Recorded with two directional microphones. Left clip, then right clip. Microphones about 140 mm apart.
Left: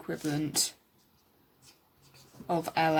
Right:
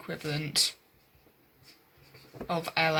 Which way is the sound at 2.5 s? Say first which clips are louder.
Even; 50° left (ahead or behind).